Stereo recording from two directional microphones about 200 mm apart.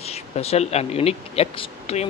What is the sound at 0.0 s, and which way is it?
Speech, 30° left (ahead or behind).